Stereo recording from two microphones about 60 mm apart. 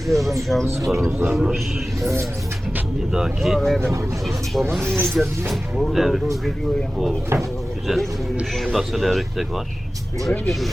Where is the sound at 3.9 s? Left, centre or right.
Right.